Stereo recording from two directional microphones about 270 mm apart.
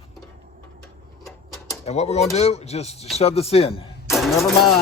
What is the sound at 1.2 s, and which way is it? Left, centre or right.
Mechanisms, centre.